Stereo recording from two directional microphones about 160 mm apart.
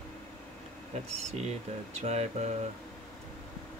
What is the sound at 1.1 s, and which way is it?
Speech, 45° right (ahead or behind).